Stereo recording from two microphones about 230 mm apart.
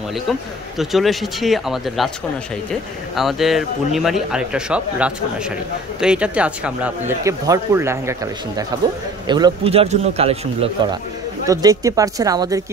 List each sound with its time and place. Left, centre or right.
0.7 s a man's voice: centre; by 10.7 s right
11.4 s speech: centre